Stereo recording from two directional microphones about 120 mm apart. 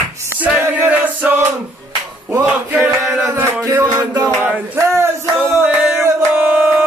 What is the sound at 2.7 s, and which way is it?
Music, 15° right (ahead or behind).